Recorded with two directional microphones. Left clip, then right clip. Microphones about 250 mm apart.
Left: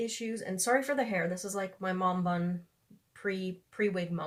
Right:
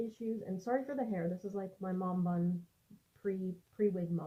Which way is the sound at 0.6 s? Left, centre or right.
Centre.